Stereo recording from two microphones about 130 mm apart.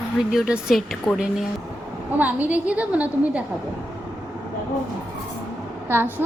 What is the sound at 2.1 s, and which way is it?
A woman's voice, 15° right (ahead or behind).